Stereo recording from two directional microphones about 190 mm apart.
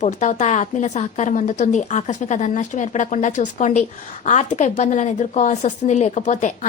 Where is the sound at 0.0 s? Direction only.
40° left (ahead or behind).